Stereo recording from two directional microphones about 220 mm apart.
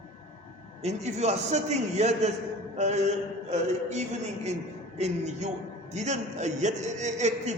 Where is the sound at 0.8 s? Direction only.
30° right (ahead or behind).